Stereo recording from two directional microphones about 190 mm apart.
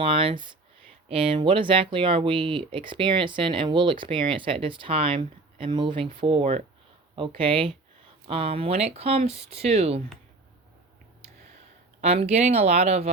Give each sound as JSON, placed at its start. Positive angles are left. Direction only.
{"t": 0.0, "sound": "speech", "side_deg": -30}
{"t": 11.9, "sound": "speech", "side_deg": -35}